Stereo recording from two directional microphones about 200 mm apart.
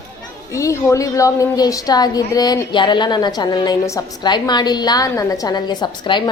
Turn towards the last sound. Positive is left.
turn(degrees=20)  # may be behind; listen again after turning